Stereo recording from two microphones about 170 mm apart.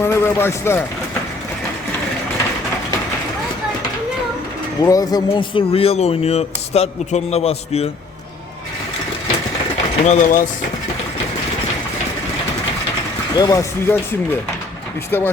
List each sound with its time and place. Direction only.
0.0 s speech: 15° left (ahead or behind)
4.8 s speech: 20° left (ahead or behind); by 7.9 s 40° left (ahead or behind)
10.1 s speech: 50° left (ahead or behind)
13.3 s speech: 20° left (ahead or behind)